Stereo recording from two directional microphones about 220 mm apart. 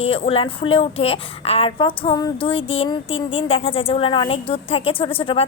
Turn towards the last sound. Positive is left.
turn(degrees=25)  # may be behind; listen again after turning